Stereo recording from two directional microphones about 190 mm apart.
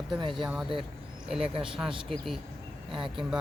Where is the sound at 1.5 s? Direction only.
30° right (ahead or behind).